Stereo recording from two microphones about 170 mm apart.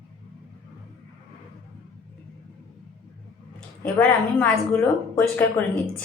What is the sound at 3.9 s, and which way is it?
A woman's voice, 10° left (ahead or behind).